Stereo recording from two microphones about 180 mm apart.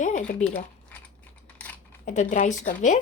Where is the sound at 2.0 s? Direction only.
45° left (ahead or behind).